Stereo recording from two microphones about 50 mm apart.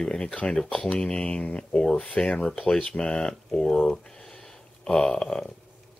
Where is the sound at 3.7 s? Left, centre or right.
Centre.